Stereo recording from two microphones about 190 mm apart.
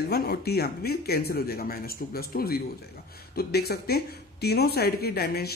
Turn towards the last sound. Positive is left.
turn(degrees=55)  # may be behind; listen again after turning